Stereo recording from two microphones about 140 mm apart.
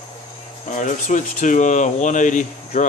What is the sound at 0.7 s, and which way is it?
Speech, 65° left (ahead or behind).